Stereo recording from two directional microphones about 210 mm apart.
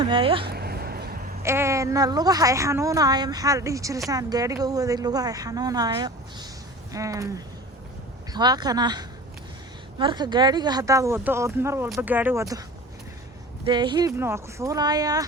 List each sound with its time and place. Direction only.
0.0 s speech: 25° right (ahead or behind)
0.4 s a sound: 50° right (ahead or behind)
1.4 s a woman's voice: 15° right (ahead or behind)
13.7 s a woman's voice: 20° right (ahead or behind)